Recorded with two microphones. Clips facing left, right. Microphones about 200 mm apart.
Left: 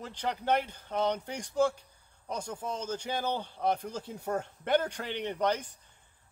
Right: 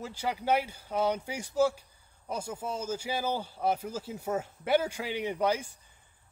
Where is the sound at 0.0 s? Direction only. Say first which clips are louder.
Right 1 dB; 10° right (ahead or behind).